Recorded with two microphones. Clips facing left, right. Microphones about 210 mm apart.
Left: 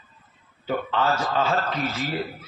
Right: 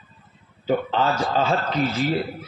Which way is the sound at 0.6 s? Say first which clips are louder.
Right 3 dB; 35° right (ahead or behind).